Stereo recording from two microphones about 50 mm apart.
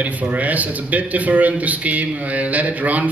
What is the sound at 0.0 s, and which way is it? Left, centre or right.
Speech, right.